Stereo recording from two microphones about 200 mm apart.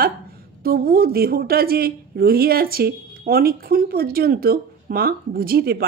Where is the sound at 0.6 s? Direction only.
45° right (ahead or behind).